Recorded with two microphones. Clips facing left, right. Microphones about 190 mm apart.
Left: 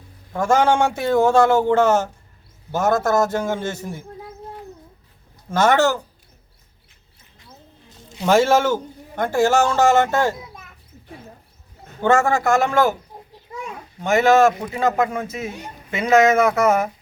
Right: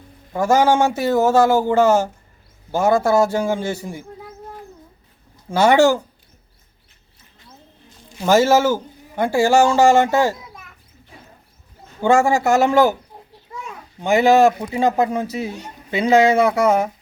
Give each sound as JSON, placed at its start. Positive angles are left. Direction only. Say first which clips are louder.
{"t": 0.3, "sound": "a man's voice", "louder": "right 2 dB", "side_deg": -5}
{"t": 5.5, "sound": "a man's voice", "louder": "right 3 dB", "side_deg": -10}
{"t": 8.2, "sound": "a man's voice", "louder": "right 2 dB", "side_deg": -5}
{"t": 12.0, "sound": "a man's voice", "louder": "right 2 dB", "side_deg": -10}
{"t": 14.0, "sound": "a man's voice", "louder": "right 1 dB", "side_deg": 0}
{"t": 14.8, "sound": "speech", "louder": "right 3 dB", "side_deg": -30}